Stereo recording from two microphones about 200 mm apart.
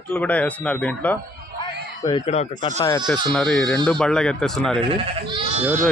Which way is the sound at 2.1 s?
30° left (ahead or behind).